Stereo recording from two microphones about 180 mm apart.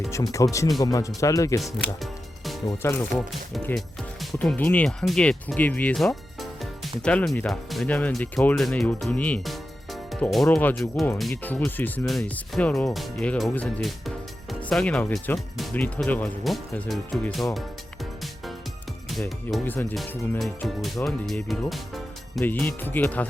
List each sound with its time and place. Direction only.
0.1 s speech: 20° left (ahead or behind)
2.6 s speech: 15° left (ahead or behind)
3.7 s speech: centre (ahead or behind)
19.6 s speech: 10° left (ahead or behind)
22.4 s speech: 10° left (ahead or behind)